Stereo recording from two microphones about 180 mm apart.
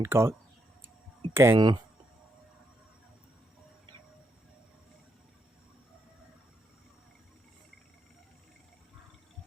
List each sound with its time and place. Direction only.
0.0 s speech: 15° right (ahead or behind)
1.5 s speech: 25° right (ahead or behind)